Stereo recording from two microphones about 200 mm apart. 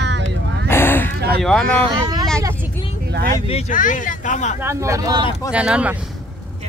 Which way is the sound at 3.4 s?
35° left (ahead or behind).